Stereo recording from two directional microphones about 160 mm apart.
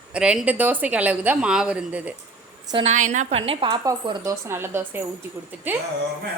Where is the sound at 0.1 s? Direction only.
5° right (ahead or behind).